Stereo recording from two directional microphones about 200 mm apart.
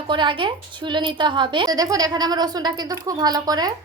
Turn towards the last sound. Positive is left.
turn(degrees=-20)  # may be behind; listen again after turning